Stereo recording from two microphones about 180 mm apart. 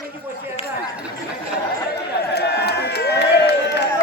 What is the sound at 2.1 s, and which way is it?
Crowd, 65° left (ahead or behind).